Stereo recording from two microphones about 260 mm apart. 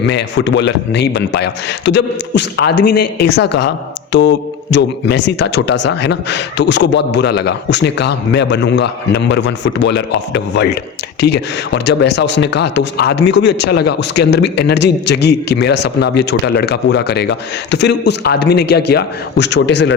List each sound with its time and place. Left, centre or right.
0.0 s speech: left